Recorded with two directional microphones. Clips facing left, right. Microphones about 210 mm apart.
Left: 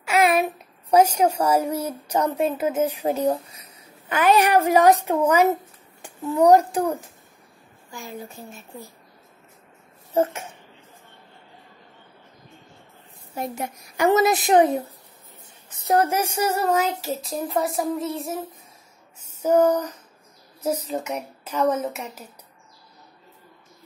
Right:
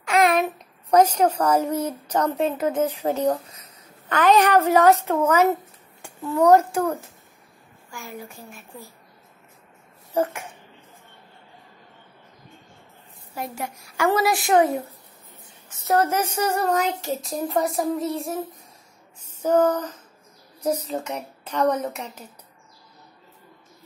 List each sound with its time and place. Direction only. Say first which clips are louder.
0.0 s a woman's voice: even; 5° left (ahead or behind)
10.1 s a woman's voice: left 2 dB; 20° left (ahead or behind)
13.3 s a woman's voice: left 2 dB; 20° left (ahead or behind)
15.8 s a woman's voice: left 1 dB; 15° left (ahead or behind)
19.4 s a woman's voice: left 1 dB; 10° left (ahead or behind)
20.9 s a woman's voice: left 1 dB; 10° left (ahead or behind)